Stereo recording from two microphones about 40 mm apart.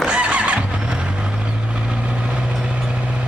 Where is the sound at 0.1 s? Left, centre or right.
Right.